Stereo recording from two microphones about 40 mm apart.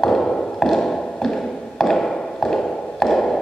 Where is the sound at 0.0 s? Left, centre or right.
Centre.